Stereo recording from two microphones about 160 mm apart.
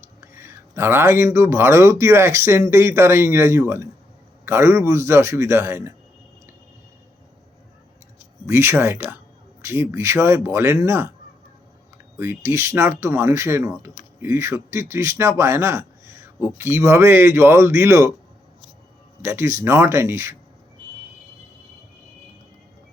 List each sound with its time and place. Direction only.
0.2 s a man's voice: 15° right (ahead or behind)
8.4 s a man's voice: 15° right (ahead or behind)
12.1 s a man's voice: 15° right (ahead or behind)
19.2 s a man's voice: 15° right (ahead or behind)